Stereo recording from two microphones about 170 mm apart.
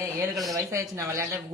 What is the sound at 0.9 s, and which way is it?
Speech, 15° right (ahead or behind).